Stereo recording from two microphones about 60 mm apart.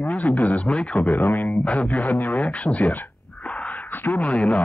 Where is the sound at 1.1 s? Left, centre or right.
Left.